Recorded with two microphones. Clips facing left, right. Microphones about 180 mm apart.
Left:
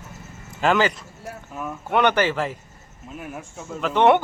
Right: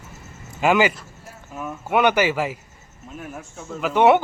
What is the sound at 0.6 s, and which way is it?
Speech, 10° right (ahead or behind).